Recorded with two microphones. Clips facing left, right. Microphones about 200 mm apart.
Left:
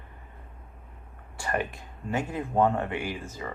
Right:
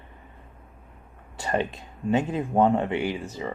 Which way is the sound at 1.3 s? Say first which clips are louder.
Right 4 dB; 20° right (ahead or behind).